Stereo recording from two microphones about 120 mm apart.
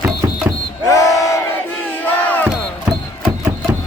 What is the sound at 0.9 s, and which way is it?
Crowd, 25° left (ahead or behind).